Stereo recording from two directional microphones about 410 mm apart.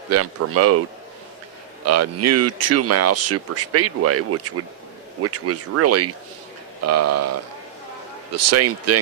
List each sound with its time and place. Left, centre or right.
0.1 s speech: right
1.9 s speech: right